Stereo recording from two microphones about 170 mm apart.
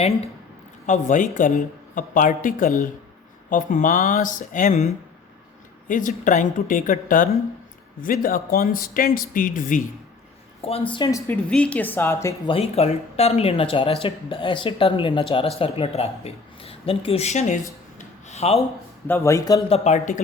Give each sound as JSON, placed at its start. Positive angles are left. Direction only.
{"t": 0.9, "sound": "speech", "side_deg": 45}
{"t": 5.9, "sound": "a man's voice", "side_deg": 50}
{"t": 10.6, "sound": "speech", "side_deg": 35}
{"t": 11.4, "sound": "a woman's voice", "side_deg": 5}
{"t": 12.5, "sound": "speech", "side_deg": 35}
{"t": 17.9, "sound": "a sound", "side_deg": 40}
{"t": 19.0, "sound": "a woman's voice", "side_deg": 15}
{"t": 19.6, "sound": "speech", "side_deg": 40}